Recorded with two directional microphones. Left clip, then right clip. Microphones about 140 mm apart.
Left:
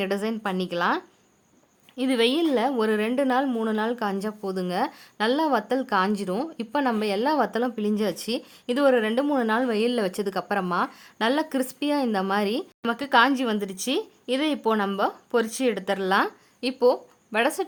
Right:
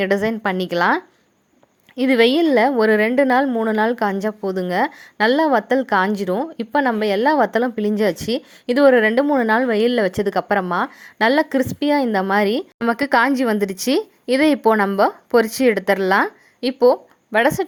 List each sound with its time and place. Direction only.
0.0 s a woman's voice: 30° right (ahead or behind)